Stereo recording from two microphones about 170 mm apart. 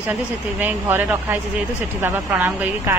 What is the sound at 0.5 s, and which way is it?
Speech, 10° right (ahead or behind).